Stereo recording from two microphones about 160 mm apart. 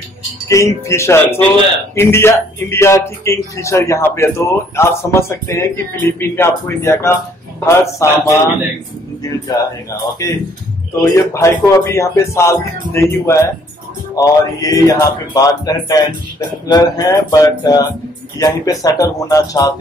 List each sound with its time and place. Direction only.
0.5 s speech: 20° left (ahead or behind)
9.5 s speech: 20° left (ahead or behind)